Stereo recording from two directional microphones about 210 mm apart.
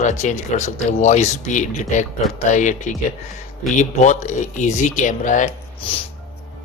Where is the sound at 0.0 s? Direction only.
35° left (ahead or behind).